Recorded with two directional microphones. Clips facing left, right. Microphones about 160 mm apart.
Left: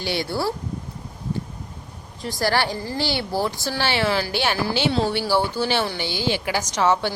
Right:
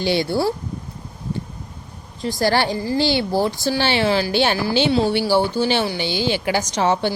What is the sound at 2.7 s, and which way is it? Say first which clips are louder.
Speech: right 7 dB; 10° right (ahead or behind).